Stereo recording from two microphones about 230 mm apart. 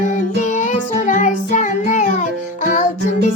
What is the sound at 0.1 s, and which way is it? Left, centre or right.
Music, left.